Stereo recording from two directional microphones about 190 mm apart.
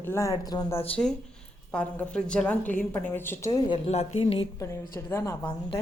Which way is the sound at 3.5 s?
25° left (ahead or behind).